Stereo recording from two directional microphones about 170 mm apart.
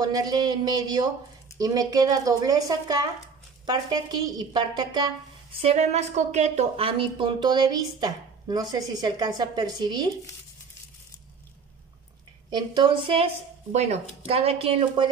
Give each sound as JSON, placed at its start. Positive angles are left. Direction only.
{"t": 0.0, "sound": "speech", "side_deg": -20}
{"t": 5.6, "sound": "speech", "side_deg": -40}
{"t": 12.4, "sound": "speech", "side_deg": -25}